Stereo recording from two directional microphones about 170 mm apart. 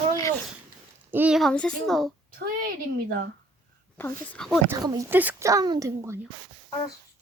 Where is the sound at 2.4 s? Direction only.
70° right (ahead or behind).